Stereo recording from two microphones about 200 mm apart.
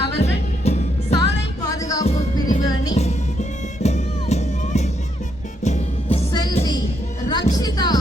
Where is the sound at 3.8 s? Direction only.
35° left (ahead or behind).